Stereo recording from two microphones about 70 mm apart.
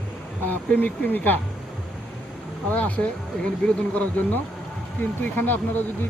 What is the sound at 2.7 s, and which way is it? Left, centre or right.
Speech, left.